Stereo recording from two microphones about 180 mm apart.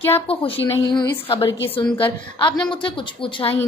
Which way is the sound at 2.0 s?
25° left (ahead or behind).